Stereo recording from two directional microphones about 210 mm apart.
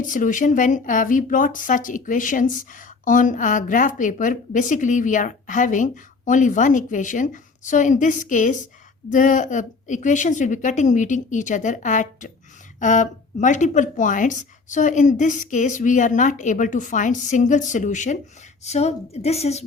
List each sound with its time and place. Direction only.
0.0 s speech: 40° left (ahead or behind)